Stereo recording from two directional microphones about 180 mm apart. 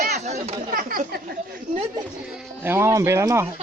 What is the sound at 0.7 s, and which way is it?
Speech, 55° right (ahead or behind).